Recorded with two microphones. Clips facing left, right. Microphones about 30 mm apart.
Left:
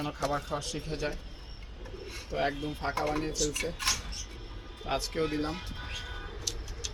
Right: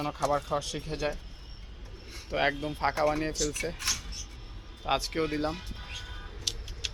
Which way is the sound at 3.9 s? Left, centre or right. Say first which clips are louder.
Left 1 dB; centre.